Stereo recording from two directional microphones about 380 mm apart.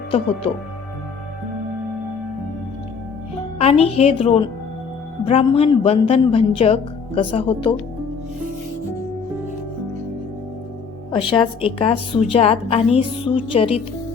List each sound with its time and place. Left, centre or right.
3.6 s a woman's voice: centre
11.1 s a woman's voice: centre